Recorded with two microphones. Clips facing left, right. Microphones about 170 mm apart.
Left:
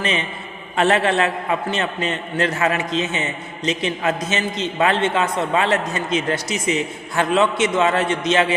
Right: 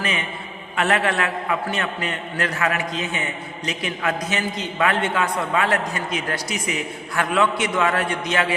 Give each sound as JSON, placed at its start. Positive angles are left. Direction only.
{"t": 0.8, "sound": "a man's voice", "side_deg": 25}